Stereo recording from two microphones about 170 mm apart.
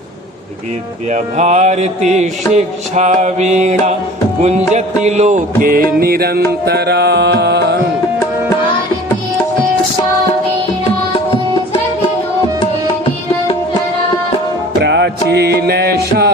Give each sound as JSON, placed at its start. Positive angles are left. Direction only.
{"t": 1.1, "sound": "mantra", "side_deg": -45}
{"t": 4.4, "sound": "music", "side_deg": -40}
{"t": 5.6, "sound": "music", "side_deg": -60}
{"t": 14.8, "sound": "music", "side_deg": -90}